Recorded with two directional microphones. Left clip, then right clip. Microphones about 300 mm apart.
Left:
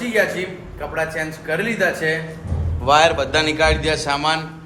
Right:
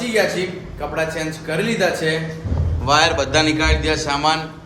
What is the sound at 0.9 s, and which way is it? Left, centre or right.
A man's voice, centre.